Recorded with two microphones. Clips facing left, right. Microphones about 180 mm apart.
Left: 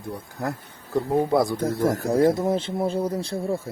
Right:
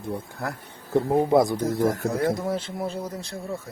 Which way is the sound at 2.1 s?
25° left (ahead or behind).